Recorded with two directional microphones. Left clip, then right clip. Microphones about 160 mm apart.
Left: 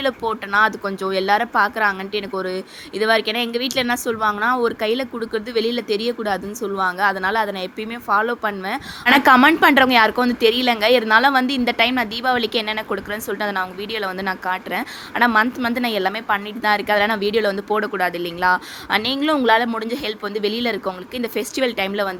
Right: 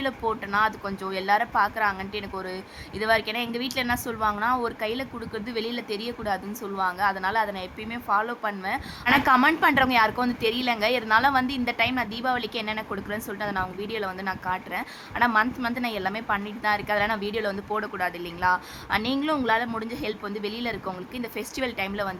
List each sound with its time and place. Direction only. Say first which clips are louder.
0.0 s a woman's voice: left 6 dB; 25° left (ahead or behind)